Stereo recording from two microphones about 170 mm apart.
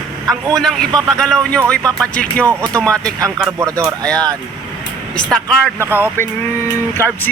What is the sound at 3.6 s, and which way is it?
Speech, 20° right (ahead or behind).